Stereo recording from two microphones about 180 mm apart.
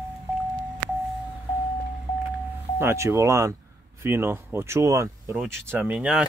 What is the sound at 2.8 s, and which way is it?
Speech, 15° right (ahead or behind).